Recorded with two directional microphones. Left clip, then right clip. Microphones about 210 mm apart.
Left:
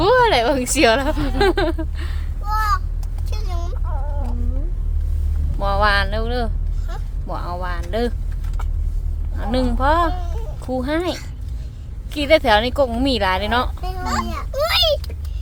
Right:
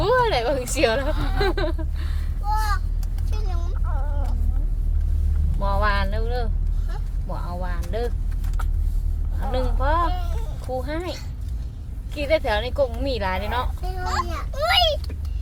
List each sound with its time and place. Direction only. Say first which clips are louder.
0.0 s a woman's voice: left 6 dB; 20° left (ahead or behind)
2.5 s vehicle: left 5 dB; 60° left (ahead or behind)
5.5 s speech: left 6 dB; 20° left (ahead or behind)
9.5 s speech: left 6 dB; 20° left (ahead or behind)
12.1 s speech: left 7 dB; 25° left (ahead or behind)
14.6 s a sound: left 2 dB; 45° left (ahead or behind)